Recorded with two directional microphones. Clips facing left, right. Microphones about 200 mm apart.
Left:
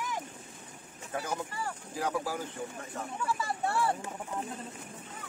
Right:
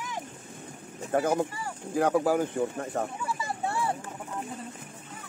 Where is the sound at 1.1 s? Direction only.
50° right (ahead or behind).